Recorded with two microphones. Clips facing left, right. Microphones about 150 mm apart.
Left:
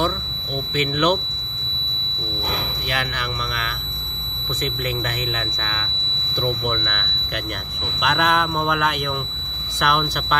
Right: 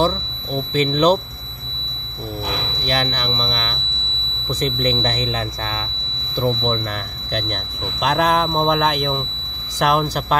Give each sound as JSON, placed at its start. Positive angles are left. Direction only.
{"t": 0.7, "sound": "speech", "side_deg": -35}
{"t": 2.9, "sound": "speech", "side_deg": -40}
{"t": 4.8, "sound": "speech", "side_deg": -35}
{"t": 6.4, "sound": "speech", "side_deg": -30}